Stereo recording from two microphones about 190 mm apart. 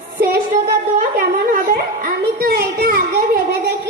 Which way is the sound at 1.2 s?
50° right (ahead or behind).